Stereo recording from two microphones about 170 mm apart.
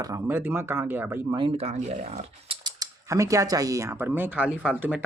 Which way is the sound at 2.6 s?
20° right (ahead or behind).